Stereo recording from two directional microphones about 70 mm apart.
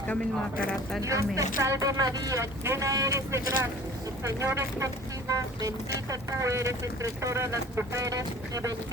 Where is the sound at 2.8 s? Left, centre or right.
Right.